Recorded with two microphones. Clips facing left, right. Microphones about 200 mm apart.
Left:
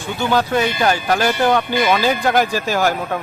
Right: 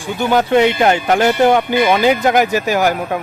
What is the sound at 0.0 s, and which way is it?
Speech, 15° right (ahead or behind).